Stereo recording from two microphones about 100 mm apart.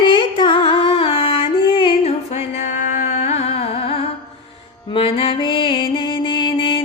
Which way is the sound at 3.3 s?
90° left.